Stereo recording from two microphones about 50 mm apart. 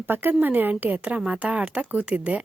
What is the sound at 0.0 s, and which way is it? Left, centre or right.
A woman's voice, right.